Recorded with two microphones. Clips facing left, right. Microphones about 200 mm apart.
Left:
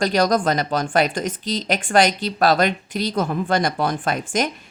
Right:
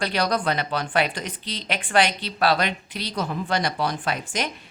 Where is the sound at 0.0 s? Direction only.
45° left (ahead or behind).